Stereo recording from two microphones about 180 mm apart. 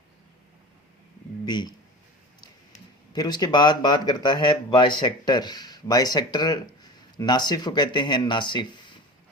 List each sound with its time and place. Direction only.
1.5 s speech: 25° left (ahead or behind)
3.1 s speech: 25° left (ahead or behind)